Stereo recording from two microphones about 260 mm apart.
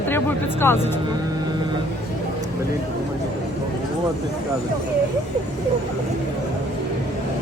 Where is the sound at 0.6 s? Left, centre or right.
Centre.